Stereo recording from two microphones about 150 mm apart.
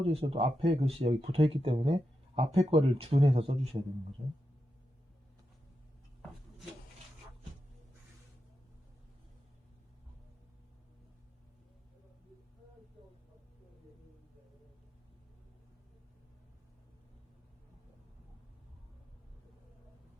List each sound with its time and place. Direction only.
0.0 s speech: 40° right (ahead or behind)
4.2 s speech: 75° right (ahead or behind)